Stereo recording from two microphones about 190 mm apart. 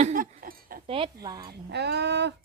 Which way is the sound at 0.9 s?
25° right (ahead or behind).